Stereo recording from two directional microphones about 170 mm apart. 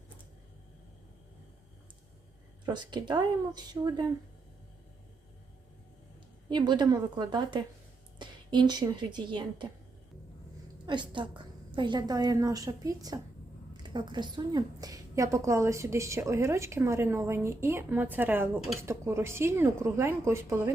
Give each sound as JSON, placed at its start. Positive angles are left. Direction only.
{"t": 2.6, "sound": "speech", "side_deg": -25}
{"t": 6.5, "sound": "a woman's voice", "side_deg": -25}
{"t": 10.8, "sound": "a woman's voice", "side_deg": -25}